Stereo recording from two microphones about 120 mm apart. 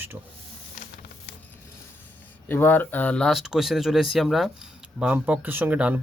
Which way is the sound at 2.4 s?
15° left (ahead or behind).